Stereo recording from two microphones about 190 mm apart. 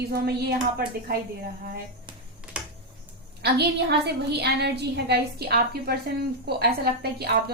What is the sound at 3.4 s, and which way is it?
A woman's voice, 60° right (ahead or behind).